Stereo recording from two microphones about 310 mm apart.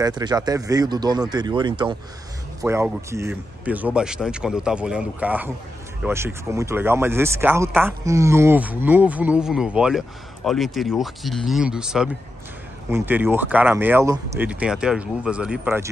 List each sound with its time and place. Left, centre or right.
0.0 s speech: centre